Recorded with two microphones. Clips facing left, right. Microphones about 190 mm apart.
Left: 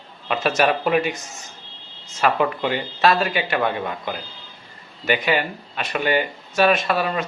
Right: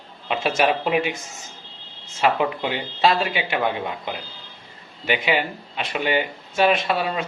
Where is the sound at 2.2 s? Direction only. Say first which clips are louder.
Left 1 dB; 10° right (ahead or behind).